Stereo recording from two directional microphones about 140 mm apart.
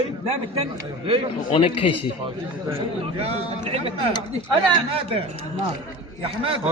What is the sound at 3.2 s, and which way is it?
Speech, 45° right (ahead or behind).